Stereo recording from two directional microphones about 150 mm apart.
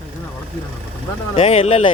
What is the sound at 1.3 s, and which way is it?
Speech, 40° left (ahead or behind).